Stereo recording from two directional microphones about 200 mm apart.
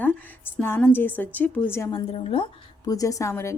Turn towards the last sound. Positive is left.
turn(degrees=15)  # may be behind; listen again after turning